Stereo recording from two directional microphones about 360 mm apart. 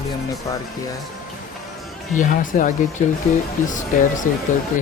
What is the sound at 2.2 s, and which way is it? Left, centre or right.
Speech, left.